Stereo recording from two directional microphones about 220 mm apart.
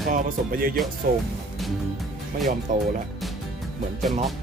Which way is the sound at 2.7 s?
35° right (ahead or behind).